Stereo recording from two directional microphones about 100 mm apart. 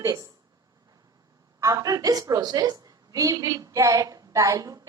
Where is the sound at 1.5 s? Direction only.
35° right (ahead or behind).